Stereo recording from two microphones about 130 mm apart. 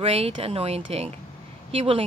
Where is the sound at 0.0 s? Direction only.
50° right (ahead or behind).